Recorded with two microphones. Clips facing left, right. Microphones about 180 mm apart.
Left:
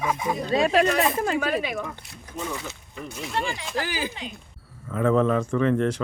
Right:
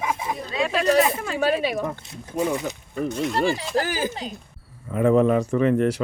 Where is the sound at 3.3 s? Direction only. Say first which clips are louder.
Right 3 dB; 35° right (ahead or behind).